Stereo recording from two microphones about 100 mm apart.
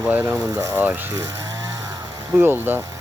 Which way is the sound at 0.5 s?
30° right (ahead or behind).